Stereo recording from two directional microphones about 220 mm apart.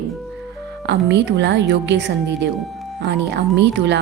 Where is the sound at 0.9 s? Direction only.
50° right (ahead or behind).